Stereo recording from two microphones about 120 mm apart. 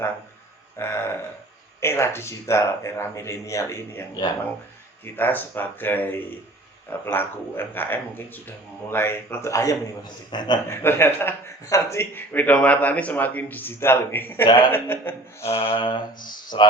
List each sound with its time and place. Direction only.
0.8 s a man's voice: 20° left (ahead or behind)
10.3 s mantra: 40° left (ahead or behind)
10.7 s a man's voice: 20° left (ahead or behind)
14.4 s a man's voice: 45° left (ahead or behind)
14.7 s speech: 20° left (ahead or behind)
15.4 s mantra: 50° left (ahead or behind)